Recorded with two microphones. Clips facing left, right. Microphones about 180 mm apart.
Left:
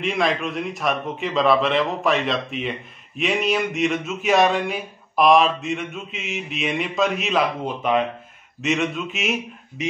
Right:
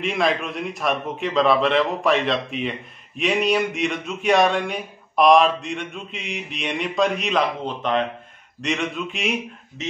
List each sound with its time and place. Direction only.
0.0 s a man's voice: centre (ahead or behind)